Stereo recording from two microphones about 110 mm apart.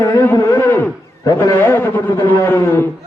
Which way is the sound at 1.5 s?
20° left (ahead or behind).